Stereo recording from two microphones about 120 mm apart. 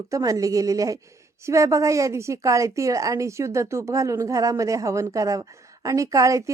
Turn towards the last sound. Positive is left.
turn(degrees=-25)  # may be behind; listen again after turning